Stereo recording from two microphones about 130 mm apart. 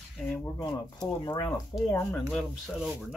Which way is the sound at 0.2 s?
5° left (ahead or behind).